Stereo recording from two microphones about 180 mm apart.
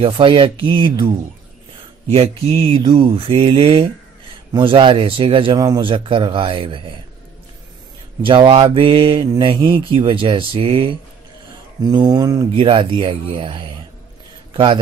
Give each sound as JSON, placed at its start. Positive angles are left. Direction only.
{"t": 0.0, "sound": "a man's voice", "side_deg": -30}
{"t": 2.0, "sound": "mantra", "side_deg": -35}
{"t": 4.5, "sound": "a man's voice", "side_deg": -25}
{"t": 8.2, "sound": "a man's voice", "side_deg": -30}